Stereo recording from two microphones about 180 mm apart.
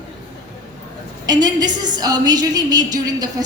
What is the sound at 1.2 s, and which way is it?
A woman's voice, 20° right (ahead or behind).